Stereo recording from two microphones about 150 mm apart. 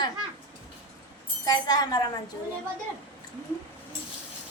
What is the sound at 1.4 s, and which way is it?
Speech, 25° left (ahead or behind).